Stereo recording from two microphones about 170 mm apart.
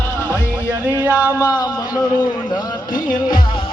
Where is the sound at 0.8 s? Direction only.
10° right (ahead or behind).